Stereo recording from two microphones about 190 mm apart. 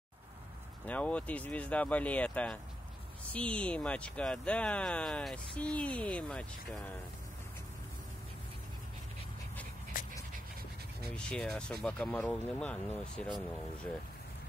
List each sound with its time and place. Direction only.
0.8 s speech: 5° left (ahead or behind)
9.9 s dog: 45° left (ahead or behind)
11.1 s speech: 5° left (ahead or behind)